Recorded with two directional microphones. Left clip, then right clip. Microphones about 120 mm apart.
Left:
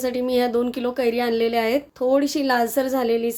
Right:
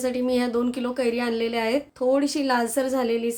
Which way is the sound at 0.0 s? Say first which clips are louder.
Left 3 dB; 25° left (ahead or behind).